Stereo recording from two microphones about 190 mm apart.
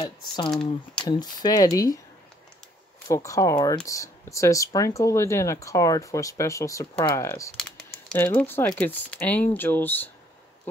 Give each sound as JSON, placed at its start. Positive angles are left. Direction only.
{"t": 0.5, "sound": "speech", "side_deg": 5}
{"t": 1.0, "sound": "speech", "side_deg": 20}
{"t": 3.1, "sound": "speech", "side_deg": 15}